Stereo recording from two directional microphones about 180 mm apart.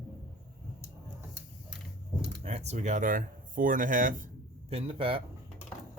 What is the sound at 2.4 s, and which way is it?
Speech, 35° right (ahead or behind).